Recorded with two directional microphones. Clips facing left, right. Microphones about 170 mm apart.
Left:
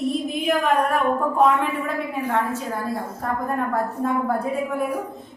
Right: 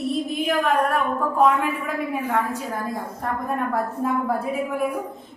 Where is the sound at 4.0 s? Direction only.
5° right (ahead or behind).